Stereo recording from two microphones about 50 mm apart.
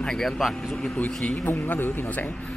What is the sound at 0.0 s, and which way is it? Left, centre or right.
Speech, centre.